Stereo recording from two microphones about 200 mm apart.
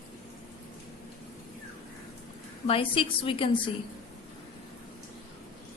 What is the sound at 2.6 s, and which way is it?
Speech, 25° left (ahead or behind).